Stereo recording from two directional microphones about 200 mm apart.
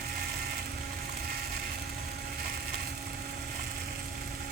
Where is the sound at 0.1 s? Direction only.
50° right (ahead or behind).